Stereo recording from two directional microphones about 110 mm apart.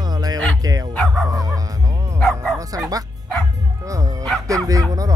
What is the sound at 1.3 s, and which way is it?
Music, 35° right (ahead or behind).